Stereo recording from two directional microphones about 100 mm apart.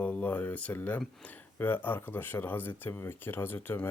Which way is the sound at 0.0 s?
15° left (ahead or behind).